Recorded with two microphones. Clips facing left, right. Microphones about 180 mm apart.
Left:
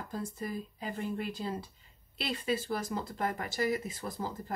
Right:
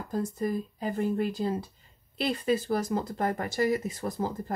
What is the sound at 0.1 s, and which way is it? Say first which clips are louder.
Speech: right 9 dB; 45° right (ahead or behind).